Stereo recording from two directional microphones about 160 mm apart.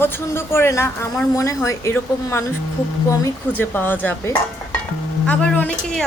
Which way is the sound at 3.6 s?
10° left (ahead or behind).